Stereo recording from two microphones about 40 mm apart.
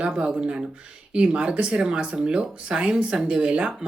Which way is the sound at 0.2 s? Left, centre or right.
Right.